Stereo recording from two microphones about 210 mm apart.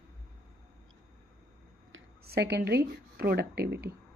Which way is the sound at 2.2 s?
50° right (ahead or behind).